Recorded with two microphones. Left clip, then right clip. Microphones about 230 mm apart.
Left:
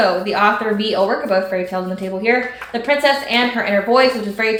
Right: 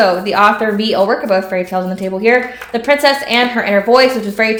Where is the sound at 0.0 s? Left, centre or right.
Right.